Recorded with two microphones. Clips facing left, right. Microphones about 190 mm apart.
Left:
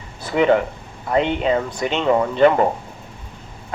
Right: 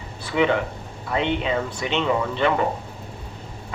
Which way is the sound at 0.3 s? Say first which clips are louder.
Left 5 dB; 40° left (ahead or behind).